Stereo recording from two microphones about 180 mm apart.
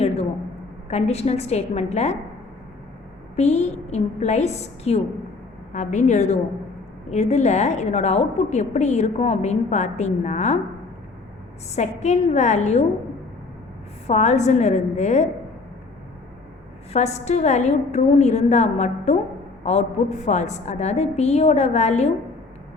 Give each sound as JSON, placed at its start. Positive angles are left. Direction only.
{"t": 0.9, "sound": "a woman's voice", "side_deg": 35}
{"t": 3.3, "sound": "a woman's voice", "side_deg": 35}
{"t": 11.7, "sound": "a woman's voice", "side_deg": 40}
{"t": 14.1, "sound": "a woman's voice", "side_deg": 40}
{"t": 16.9, "sound": "a woman's voice", "side_deg": 40}